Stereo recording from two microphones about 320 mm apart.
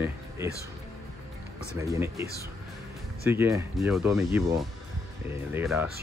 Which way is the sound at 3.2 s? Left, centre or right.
Centre.